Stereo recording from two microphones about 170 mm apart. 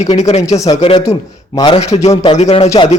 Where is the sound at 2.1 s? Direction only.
25° left (ahead or behind).